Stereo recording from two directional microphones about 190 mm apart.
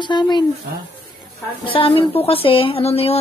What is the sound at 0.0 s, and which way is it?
Speech, 25° left (ahead or behind).